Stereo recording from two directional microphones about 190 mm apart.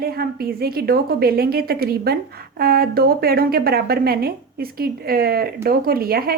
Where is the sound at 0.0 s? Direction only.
55° right (ahead or behind).